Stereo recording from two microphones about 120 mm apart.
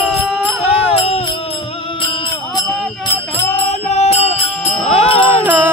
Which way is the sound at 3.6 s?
60° left (ahead or behind).